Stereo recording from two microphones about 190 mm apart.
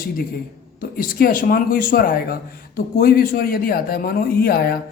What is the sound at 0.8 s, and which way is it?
A man's voice, 50° left (ahead or behind).